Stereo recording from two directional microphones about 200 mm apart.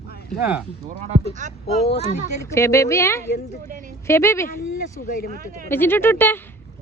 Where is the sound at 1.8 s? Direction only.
30° left (ahead or behind).